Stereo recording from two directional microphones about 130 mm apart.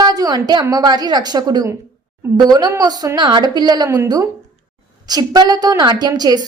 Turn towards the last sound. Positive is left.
turn(degrees=-30)  # may be behind; listen again after turning